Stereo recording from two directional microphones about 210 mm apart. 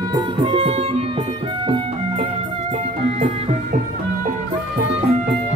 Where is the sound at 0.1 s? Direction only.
25° right (ahead or behind).